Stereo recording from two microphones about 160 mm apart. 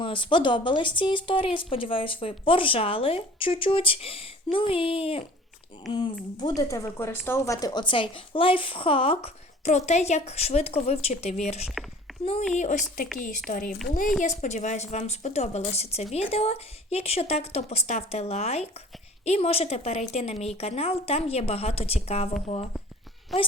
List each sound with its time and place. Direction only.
0.0 s speech: 30° left (ahead or behind)
11.7 s a sound: centre (ahead or behind)
12.2 s speech: 40° left (ahead or behind)
12.5 s a woman's voice: 50° left (ahead or behind)
23.3 s a woman's voice: centre (ahead or behind)